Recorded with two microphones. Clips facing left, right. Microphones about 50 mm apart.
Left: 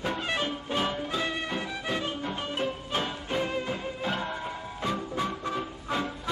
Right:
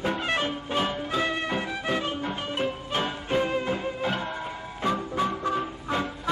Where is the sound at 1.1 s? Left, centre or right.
Right.